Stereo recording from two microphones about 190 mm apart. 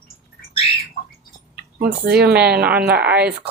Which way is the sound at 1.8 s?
55° right (ahead or behind).